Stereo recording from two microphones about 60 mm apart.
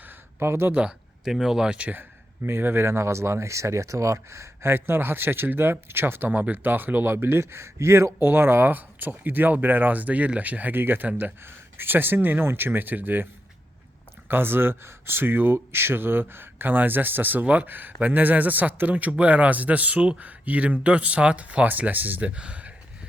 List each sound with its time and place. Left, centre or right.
0.0 s a sound: right
0.7 s a man's voice: centre
1.2 s speech: centre
1.9 s speech: right
14.3 s a man's voice: right